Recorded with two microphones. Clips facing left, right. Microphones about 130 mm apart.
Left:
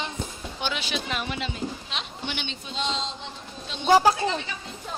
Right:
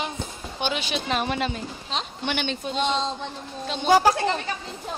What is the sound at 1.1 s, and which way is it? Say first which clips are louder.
Speech: right 5 dB; 45° right (ahead or behind).